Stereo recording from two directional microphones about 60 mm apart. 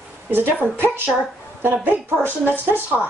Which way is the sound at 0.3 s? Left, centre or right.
Right.